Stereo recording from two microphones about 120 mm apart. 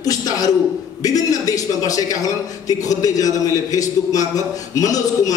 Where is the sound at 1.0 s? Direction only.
30° left (ahead or behind).